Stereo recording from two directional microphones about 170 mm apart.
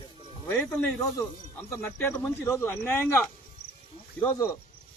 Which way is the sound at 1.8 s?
15° left (ahead or behind).